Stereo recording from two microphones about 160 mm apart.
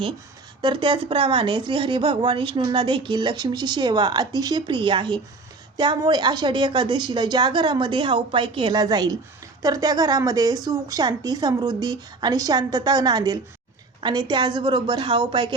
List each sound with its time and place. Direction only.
0.6 s a woman's voice: 30° right (ahead or behind)